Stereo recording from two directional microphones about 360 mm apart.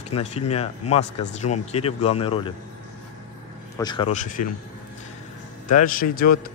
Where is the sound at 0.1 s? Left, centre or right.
Centre.